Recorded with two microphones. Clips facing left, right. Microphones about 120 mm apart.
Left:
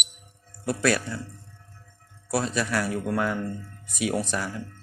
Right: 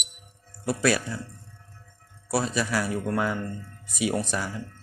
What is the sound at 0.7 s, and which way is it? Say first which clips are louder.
Speech: even; 5° right (ahead or behind).